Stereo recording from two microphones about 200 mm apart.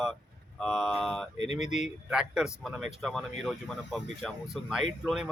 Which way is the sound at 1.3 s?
35° left (ahead or behind).